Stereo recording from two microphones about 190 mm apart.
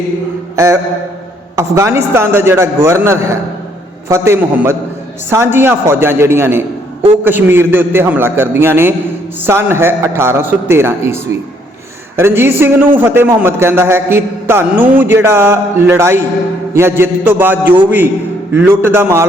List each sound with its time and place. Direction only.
0.5 s a man's voice: 15° right (ahead or behind)